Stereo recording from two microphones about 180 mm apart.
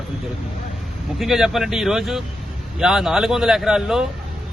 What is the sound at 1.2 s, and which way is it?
A man's voice, centre (ahead or behind).